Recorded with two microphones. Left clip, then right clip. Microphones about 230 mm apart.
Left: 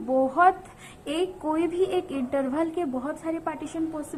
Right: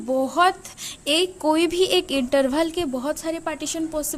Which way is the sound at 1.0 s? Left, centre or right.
Right.